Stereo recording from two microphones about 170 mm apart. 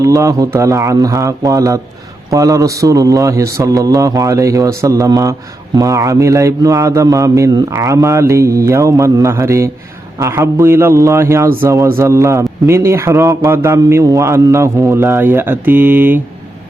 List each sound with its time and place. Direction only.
0.0 s a man's voice: 20° right (ahead or behind)